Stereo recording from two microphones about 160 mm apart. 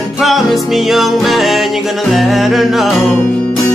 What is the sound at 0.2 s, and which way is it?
Music, centre (ahead or behind).